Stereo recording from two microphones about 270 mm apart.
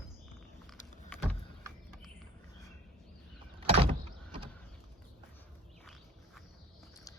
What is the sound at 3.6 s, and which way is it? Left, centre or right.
Sliding door, right.